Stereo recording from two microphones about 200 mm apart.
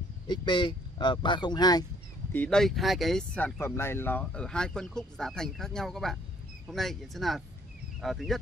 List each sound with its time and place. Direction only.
0.3 s speech: 25° left (ahead or behind)
2.3 s speech: 5° left (ahead or behind)